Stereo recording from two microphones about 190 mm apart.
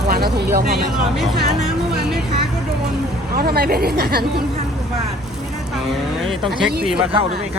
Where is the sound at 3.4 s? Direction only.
55° right (ahead or behind).